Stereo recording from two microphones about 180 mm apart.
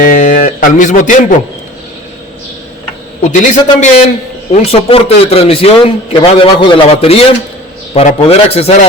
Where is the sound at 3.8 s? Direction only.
45° left (ahead or behind).